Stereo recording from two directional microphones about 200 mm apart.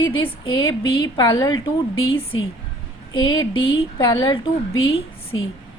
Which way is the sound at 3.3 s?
20° left (ahead or behind).